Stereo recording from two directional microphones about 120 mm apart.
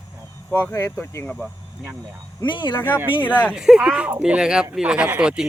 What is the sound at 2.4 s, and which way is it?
Speech, 40° left (ahead or behind).